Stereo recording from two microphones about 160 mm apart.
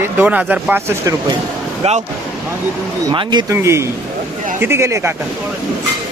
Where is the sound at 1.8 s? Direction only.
45° right (ahead or behind).